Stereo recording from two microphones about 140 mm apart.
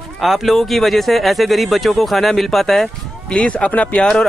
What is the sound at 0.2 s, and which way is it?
Speech, centre (ahead or behind).